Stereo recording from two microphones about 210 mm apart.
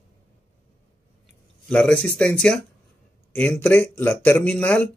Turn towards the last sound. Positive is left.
turn(degrees=10)  # may be behind; listen again after turning